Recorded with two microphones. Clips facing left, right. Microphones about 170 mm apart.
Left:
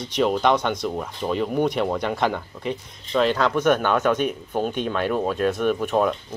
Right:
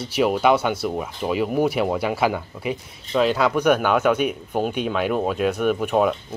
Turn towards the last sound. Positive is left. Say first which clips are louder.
# right 1 dB
turn(degrees=-5)  # may be behind; listen again after turning